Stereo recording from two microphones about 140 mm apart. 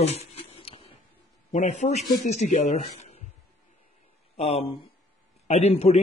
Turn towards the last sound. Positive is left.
turn(degrees=45)  # may be behind; listen again after turning